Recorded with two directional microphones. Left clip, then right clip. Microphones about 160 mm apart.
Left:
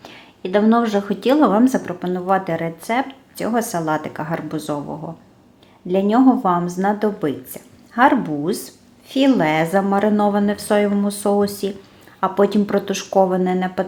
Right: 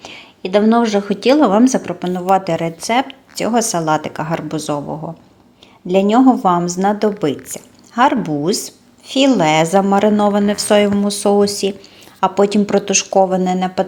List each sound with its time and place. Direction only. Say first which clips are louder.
0.0 s a woman's voice: right 3 dB; 30° right (ahead or behind)